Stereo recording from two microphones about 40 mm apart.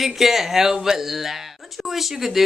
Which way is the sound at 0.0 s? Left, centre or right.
Centre.